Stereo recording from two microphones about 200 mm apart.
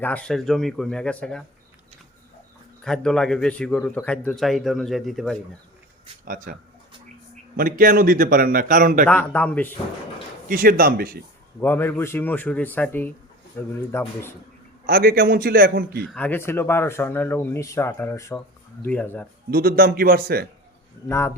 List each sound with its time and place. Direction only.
0.0 s speech: 5° left (ahead or behind)
2.8 s speech: 5° left (ahead or behind)
6.2 s a man's voice: 45° right (ahead or behind)
9.0 s speech: 5° left (ahead or behind)
10.5 s a man's voice: 45° right (ahead or behind)
11.6 s speech: 10° left (ahead or behind)
14.8 s a man's voice: 50° right (ahead or behind)
16.0 s speech: 5° left (ahead or behind)
19.5 s a man's voice: 45° right (ahead or behind)
21.1 s speech: 15° left (ahead or behind)